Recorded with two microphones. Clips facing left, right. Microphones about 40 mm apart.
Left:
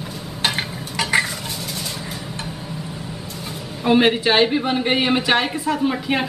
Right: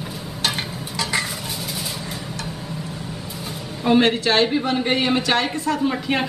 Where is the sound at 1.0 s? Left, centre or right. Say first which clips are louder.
Left 5 dB; left.